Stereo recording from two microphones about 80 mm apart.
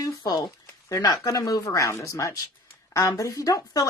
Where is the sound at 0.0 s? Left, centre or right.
Left.